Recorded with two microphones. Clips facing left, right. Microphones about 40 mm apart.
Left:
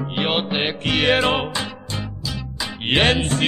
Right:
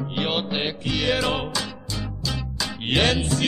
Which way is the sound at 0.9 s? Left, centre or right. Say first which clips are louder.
Left 6 dB; left.